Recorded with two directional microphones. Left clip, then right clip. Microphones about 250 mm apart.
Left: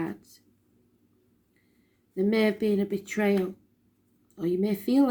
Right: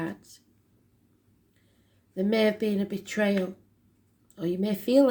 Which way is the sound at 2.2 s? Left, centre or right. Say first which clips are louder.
Even; right.